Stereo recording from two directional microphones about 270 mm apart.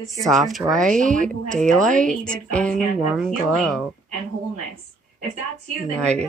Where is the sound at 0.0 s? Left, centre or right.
Centre.